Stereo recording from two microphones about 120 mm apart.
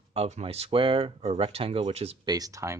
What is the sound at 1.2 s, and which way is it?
Speech, 60° right (ahead or behind).